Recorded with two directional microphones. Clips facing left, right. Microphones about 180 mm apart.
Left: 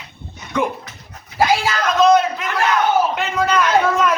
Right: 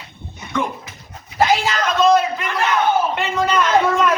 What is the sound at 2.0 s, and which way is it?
A man's voice, centre (ahead or behind).